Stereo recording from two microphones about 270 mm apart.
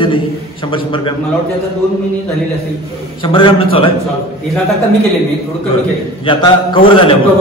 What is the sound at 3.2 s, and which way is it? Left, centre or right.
Speech, centre.